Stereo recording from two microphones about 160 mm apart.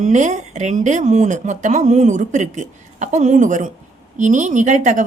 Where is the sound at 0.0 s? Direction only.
50° right (ahead or behind).